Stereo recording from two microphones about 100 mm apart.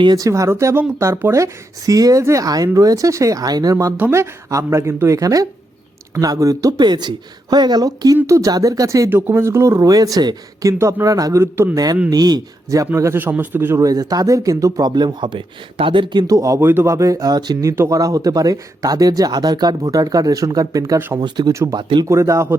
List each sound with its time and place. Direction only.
0.0 s speech: 45° right (ahead or behind)
0.3 s speech: 30° right (ahead or behind)
3.9 s speech: 25° right (ahead or behind)
9.0 s speech: 20° right (ahead or behind)
12.1 s speech: 40° right (ahead or behind)
12.9 s speech: 25° right (ahead or behind)
13.8 s speech: 40° right (ahead or behind); by 16.2 s 55° right (ahead or behind)
16.2 s speech: 35° right (ahead or behind)
21.2 s speech: 45° right (ahead or behind)
21.5 s speech: 30° right (ahead or behind)
21.8 s speech: 50° right (ahead or behind)
22.0 s speech: 30° right (ahead or behind)